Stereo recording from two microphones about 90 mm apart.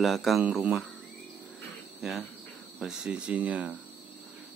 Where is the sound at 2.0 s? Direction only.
5° right (ahead or behind).